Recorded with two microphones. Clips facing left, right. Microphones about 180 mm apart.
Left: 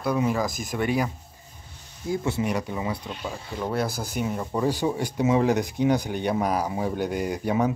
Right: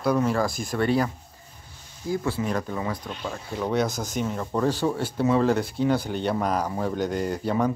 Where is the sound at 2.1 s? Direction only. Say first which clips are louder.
Even; 20° left (ahead or behind).